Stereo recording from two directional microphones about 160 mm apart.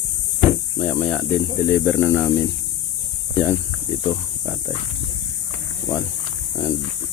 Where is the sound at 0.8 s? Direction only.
10° left (ahead or behind).